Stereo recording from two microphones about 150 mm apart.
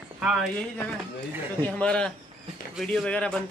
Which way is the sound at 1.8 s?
5° left (ahead or behind).